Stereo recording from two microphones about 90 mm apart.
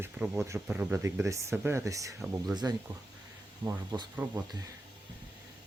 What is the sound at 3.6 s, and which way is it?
Speech, 65° right (ahead or behind).